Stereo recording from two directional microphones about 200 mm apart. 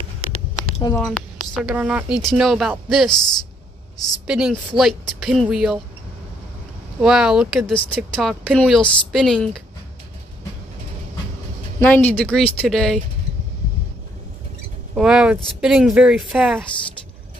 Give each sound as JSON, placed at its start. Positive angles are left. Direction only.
{"t": 0.9, "sound": "speech", "side_deg": 5}
{"t": 3.1, "sound": "speech", "side_deg": 20}
{"t": 4.3, "sound": "speech", "side_deg": -5}
{"t": 7.0, "sound": "speech", "side_deg": -5}
{"t": 11.8, "sound": "speech", "side_deg": 10}
{"t": 15.0, "sound": "speech", "side_deg": -5}